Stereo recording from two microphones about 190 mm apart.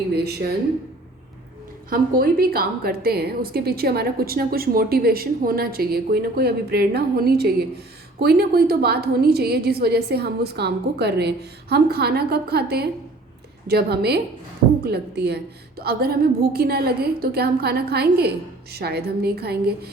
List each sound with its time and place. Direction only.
0.1 s a woman's voice: 60° right (ahead or behind)
1.9 s a woman's voice: 50° right (ahead or behind)